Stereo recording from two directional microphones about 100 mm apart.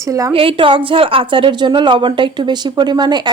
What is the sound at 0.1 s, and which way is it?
Speech, 35° right (ahead or behind).